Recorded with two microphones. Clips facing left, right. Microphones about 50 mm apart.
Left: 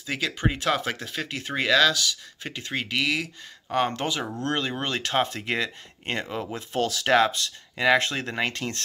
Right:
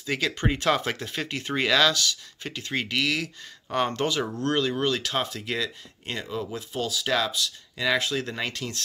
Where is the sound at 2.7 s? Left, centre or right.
Centre; by 6.6 s left.